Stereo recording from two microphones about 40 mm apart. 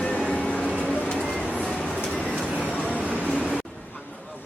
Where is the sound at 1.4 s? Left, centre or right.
Left.